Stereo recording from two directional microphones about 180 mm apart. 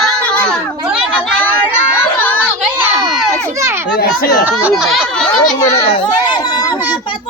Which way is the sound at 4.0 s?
55° left (ahead or behind).